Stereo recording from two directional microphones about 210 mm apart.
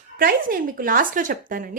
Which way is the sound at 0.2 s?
45° right (ahead or behind).